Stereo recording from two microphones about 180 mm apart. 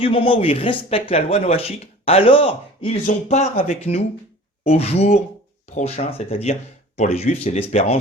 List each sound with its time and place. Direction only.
0.0 s speech: 30° left (ahead or behind)